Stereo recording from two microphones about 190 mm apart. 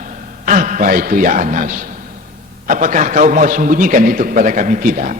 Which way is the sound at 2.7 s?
45° right (ahead or behind).